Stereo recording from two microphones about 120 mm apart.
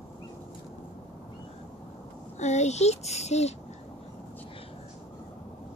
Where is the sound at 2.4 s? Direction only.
70° left (ahead or behind).